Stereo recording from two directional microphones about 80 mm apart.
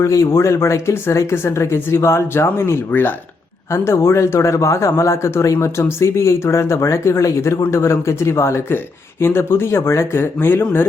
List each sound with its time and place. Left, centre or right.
0.0 s speech: left